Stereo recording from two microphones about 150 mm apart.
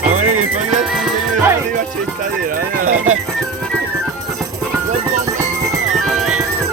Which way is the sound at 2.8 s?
55° right (ahead or behind).